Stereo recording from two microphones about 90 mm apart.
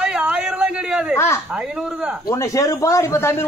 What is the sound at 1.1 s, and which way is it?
Speech, 30° left (ahead or behind).